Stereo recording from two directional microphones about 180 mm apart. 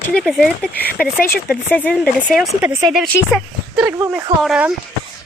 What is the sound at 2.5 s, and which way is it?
Speech, 10° right (ahead or behind).